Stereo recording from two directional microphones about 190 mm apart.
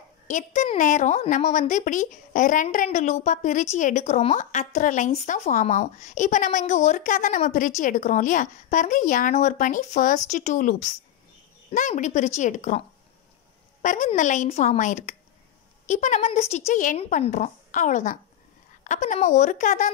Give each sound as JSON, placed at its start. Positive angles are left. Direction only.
{"t": 0.3, "sound": "speech", "side_deg": 40}
{"t": 13.8, "sound": "speech", "side_deg": 40}